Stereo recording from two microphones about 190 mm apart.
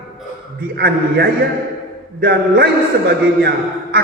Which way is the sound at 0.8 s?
55° right (ahead or behind).